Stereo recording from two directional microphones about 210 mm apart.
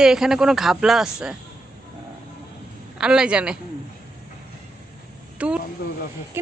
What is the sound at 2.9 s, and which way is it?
Speech, 5° right (ahead or behind).